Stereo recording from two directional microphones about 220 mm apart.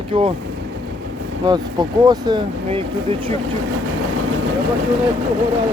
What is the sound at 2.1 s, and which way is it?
Speech, 20° right (ahead or behind).